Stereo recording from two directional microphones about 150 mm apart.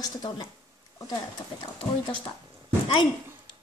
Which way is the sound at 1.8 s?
35° left (ahead or behind).